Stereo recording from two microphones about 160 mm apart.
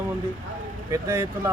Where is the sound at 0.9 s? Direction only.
20° right (ahead or behind).